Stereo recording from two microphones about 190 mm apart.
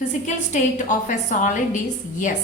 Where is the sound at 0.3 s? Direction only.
40° left (ahead or behind).